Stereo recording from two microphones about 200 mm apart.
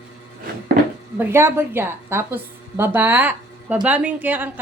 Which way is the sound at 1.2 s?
10° right (ahead or behind).